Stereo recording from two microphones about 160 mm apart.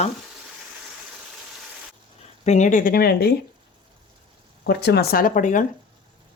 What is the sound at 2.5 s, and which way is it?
Speech, 50° left (ahead or behind).